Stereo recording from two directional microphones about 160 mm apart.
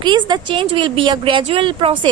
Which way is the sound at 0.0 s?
30° right (ahead or behind).